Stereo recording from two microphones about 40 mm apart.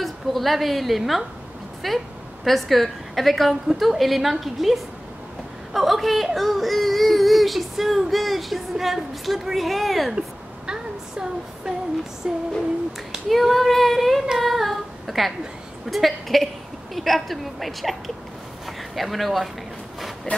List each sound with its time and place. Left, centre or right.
0.0 s a woman's voice: centre
10.7 s a sound: centre
12.2 s music: centre
13.3 s speech: centre
14.4 s female singing: centre
15.9 s speech: centre
20.3 s a sound: left